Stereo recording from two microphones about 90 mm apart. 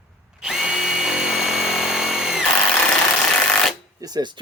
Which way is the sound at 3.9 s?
45° right (ahead or behind).